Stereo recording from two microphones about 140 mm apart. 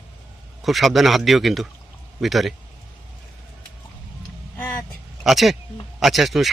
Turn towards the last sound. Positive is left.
turn(degrees=0)  # may be behind; listen again after turning